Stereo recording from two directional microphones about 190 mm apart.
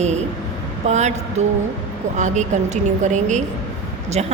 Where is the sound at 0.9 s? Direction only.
35° right (ahead or behind).